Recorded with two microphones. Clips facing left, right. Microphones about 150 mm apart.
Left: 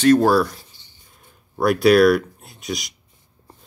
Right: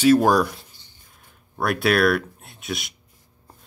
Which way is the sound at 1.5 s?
Centre (ahead or behind).